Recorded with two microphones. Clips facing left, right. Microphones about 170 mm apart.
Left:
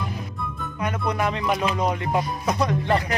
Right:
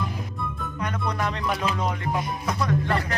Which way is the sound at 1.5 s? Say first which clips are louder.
Left 3 dB; 15° left (ahead or behind).